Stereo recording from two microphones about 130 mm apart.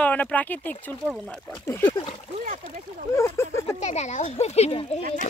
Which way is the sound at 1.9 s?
40° left (ahead or behind).